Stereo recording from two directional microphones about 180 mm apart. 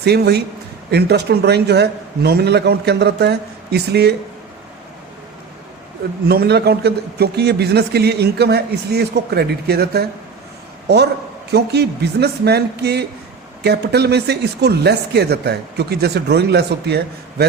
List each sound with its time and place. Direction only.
0.0 s speech: 65° right (ahead or behind)
6.2 s a man's voice: 60° right (ahead or behind)